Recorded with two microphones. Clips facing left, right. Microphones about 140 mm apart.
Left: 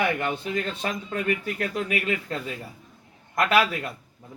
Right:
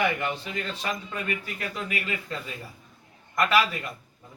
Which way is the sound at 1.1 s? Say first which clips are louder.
Left 6 dB; 60° left (ahead or behind).